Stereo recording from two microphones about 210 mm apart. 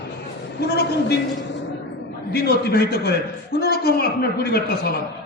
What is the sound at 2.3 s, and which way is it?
A man's voice, 50° left (ahead or behind).